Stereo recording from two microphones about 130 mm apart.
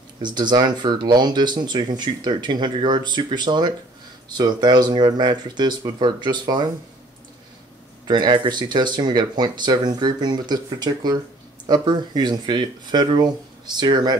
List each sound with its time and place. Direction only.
0.2 s speech: 35° right (ahead or behind)
8.1 s speech: 35° right (ahead or behind)